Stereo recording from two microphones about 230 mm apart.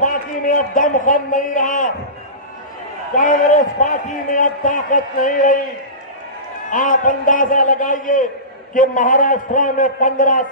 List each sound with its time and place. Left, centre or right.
0.0 s a man's voice: left
3.2 s a man's voice: left
6.7 s a man's voice: left